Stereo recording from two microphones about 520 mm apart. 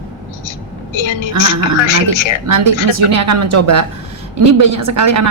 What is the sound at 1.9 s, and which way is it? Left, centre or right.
Speech, left.